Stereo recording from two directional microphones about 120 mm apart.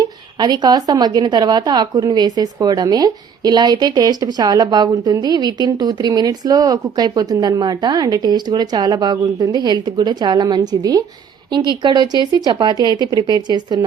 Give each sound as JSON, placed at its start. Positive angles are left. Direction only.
{"t": 0.0, "sound": "speech", "side_deg": -35}